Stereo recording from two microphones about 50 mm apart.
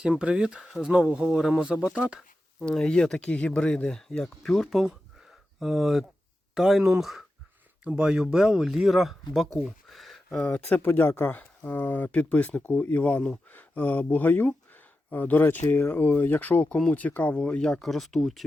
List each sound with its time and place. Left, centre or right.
0.0 s speech: centre
2.6 s speech: centre
4.7 s speech: centre
7.9 s speech: centre
10.8 s speech: left
11.3 s speech: left
16.6 s speech: centre
17.7 s speech: centre